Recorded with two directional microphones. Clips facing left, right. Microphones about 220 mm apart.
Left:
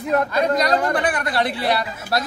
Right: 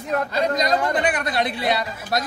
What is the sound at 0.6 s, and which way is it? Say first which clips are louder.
Speech: left 1 dB; 20° right (ahead or behind).